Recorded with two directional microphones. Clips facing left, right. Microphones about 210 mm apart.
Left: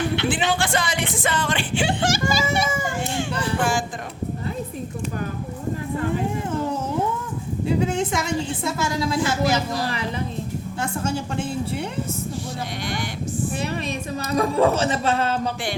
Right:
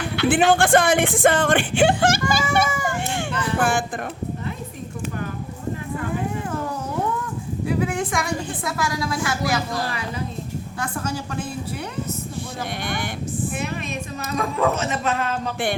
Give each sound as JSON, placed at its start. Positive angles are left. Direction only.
{"t": 0.3, "sound": "speech", "side_deg": -50}
{"t": 3.6, "sound": "a sound", "side_deg": -60}
{"t": 7.7, "sound": "a woman's voice", "side_deg": 25}
{"t": 10.8, "sound": "a woman's voice", "side_deg": 25}
{"t": 12.8, "sound": "speech", "side_deg": -55}
{"t": 13.8, "sound": "a woman's voice", "side_deg": 30}